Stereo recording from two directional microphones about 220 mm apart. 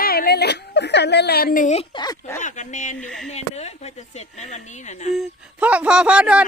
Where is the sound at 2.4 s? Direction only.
35° left (ahead or behind).